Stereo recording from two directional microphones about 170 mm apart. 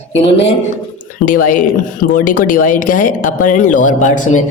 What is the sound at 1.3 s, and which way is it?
Speech, 50° left (ahead or behind).